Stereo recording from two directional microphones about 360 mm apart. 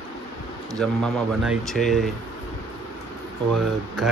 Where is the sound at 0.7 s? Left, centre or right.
Centre.